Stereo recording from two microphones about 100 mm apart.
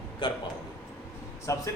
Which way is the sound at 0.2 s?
60° left (ahead or behind).